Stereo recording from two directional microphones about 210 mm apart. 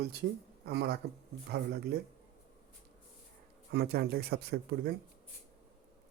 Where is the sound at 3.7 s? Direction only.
50° right (ahead or behind).